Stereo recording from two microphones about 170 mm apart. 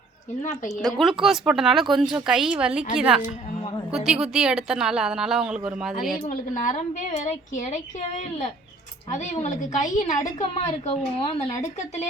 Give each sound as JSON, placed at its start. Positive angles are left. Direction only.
{"t": 0.8, "sound": "speech", "side_deg": 0}
{"t": 6.2, "sound": "a woman's voice", "side_deg": 50}